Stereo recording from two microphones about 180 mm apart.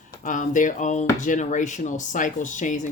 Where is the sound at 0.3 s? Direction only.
45° left (ahead or behind).